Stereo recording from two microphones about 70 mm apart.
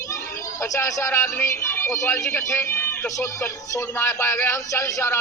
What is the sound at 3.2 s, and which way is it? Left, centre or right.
A man's voice, left.